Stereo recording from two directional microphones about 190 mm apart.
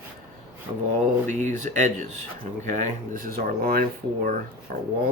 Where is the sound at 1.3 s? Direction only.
40° right (ahead or behind).